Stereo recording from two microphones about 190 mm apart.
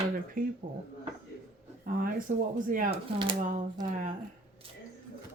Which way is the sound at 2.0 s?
45° right (ahead or behind).